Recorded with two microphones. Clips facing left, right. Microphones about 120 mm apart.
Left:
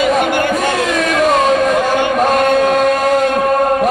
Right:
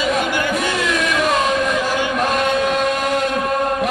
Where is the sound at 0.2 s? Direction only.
55° left (ahead or behind).